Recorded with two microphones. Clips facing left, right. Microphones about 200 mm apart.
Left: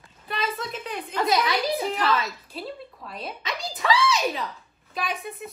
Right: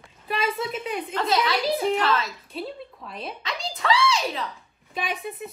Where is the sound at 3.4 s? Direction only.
15° left (ahead or behind).